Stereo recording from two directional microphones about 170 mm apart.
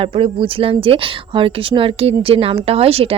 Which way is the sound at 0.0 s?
30° right (ahead or behind).